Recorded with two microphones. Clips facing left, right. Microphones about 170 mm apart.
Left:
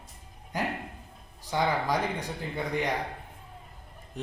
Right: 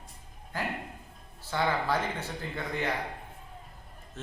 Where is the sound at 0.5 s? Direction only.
15° left (ahead or behind).